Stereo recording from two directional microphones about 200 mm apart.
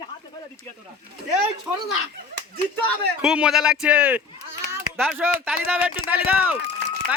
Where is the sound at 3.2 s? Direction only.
5° right (ahead or behind).